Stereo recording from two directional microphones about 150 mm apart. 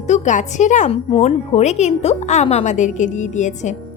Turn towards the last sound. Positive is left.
turn(degrees=55)  # may be behind; listen again after turning